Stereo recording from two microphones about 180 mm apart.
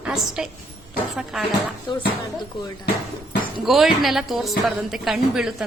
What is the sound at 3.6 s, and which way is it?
A woman's voice, centre (ahead or behind).